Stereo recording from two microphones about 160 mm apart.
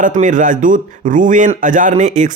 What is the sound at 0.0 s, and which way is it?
Speech, 55° right (ahead or behind).